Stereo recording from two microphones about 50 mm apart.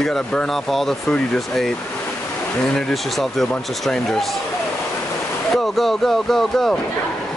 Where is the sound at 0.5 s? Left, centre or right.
Centre.